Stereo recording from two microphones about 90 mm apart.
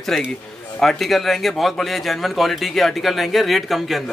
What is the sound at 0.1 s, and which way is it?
Speech, centre (ahead or behind).